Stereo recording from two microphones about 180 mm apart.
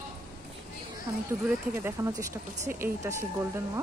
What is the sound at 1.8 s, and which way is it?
Speech, 15° right (ahead or behind).